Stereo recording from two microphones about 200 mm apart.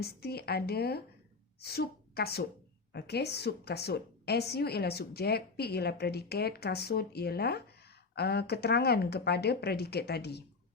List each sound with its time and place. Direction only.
0.0 s a woman's voice: 50° left (ahead or behind)